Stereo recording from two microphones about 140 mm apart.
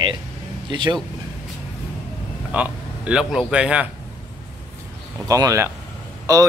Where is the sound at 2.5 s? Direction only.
10° right (ahead or behind).